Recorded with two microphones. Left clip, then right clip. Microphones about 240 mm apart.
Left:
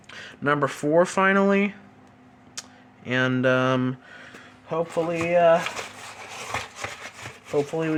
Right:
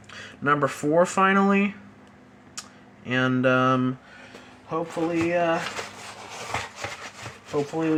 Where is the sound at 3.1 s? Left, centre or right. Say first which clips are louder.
Even; centre.